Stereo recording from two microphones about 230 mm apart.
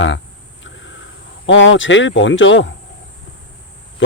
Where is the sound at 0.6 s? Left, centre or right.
Left.